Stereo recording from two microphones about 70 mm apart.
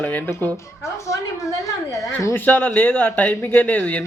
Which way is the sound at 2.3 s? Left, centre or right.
Left.